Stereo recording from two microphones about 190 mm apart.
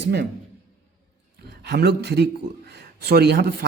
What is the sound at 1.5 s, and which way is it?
A man's voice, 60° right (ahead or behind).